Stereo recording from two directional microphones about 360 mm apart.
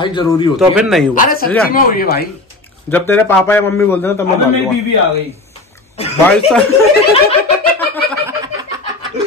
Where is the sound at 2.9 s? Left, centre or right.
Centre.